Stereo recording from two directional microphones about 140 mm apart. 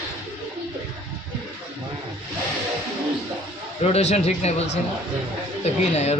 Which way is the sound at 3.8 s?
50° left (ahead or behind).